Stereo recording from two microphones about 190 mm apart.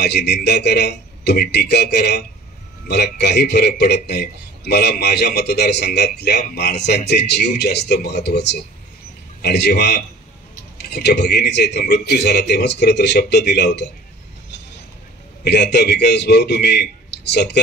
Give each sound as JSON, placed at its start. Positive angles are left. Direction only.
{"t": 0.0, "sound": "a man's voice", "side_deg": 60}
{"t": 15.4, "sound": "a man's voice", "side_deg": 60}